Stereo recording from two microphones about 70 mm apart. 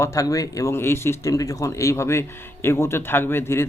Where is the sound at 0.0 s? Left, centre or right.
Left.